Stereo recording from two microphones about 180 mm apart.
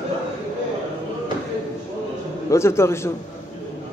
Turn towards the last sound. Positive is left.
turn(degrees=15)  # may be behind; listen again after turning